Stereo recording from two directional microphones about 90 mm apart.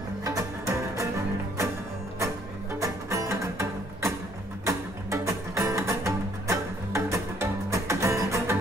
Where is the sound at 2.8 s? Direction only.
35° right (ahead or behind).